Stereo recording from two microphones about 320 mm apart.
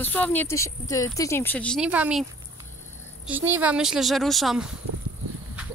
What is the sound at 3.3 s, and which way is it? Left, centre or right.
Speech, centre.